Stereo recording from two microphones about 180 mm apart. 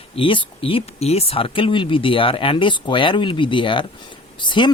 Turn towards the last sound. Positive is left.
turn(degrees=25)  # may be behind; listen again after turning